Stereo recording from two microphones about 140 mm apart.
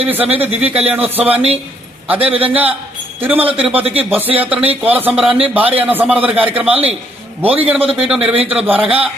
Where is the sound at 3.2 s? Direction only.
10° right (ahead or behind).